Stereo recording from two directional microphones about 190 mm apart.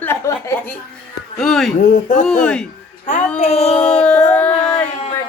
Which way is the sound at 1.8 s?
40° left (ahead or behind).